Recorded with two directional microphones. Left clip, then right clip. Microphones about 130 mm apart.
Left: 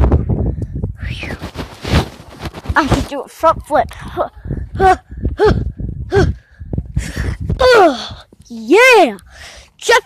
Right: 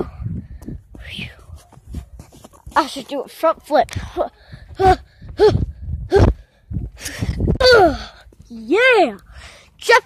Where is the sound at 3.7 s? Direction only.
20° right (ahead or behind).